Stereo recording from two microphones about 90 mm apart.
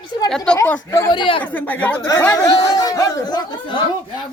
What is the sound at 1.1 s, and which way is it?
Speech, 65° left (ahead or behind).